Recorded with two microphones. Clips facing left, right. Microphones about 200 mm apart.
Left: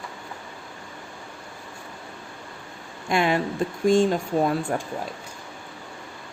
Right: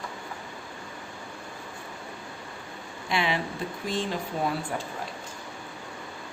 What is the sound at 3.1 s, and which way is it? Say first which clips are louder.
Speech: left 6 dB; 50° left (ahead or behind).